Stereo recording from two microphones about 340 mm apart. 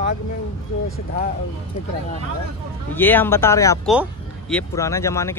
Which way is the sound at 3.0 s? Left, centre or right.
Centre.